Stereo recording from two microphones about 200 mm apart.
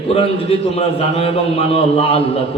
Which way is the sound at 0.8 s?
30° left (ahead or behind).